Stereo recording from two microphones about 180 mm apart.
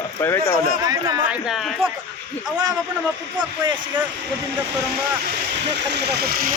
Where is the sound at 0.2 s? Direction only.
15° left (ahead or behind).